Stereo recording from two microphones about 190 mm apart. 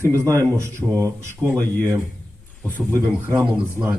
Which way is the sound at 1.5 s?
10° left (ahead or behind).